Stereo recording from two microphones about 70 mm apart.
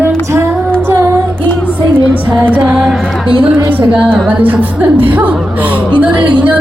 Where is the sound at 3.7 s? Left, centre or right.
Right.